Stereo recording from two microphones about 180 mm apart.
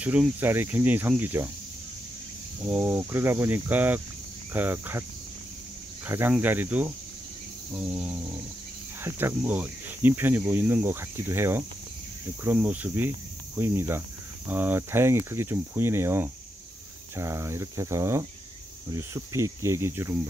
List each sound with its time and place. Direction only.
0.0 s speech: 10° right (ahead or behind)
2.6 s speech: 10° right (ahead or behind)
6.0 s speech: 10° right (ahead or behind)
7.7 s a sound: 5° right (ahead or behind)
9.0 s speech: 10° right (ahead or behind)